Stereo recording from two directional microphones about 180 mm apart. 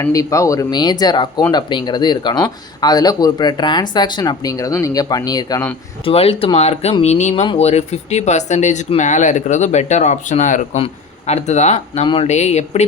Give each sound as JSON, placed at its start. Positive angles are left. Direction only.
{"t": 0.0, "sound": "speech", "side_deg": 20}
{"t": 6.1, "sound": "speech", "side_deg": 30}